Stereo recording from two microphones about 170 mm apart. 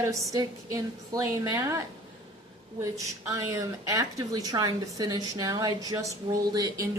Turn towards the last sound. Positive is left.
turn(degrees=-20)  # may be behind; listen again after turning